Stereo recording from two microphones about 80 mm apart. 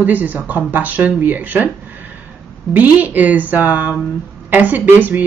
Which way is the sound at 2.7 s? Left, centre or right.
Right.